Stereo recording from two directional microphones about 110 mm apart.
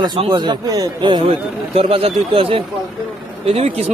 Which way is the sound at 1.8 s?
60° right (ahead or behind).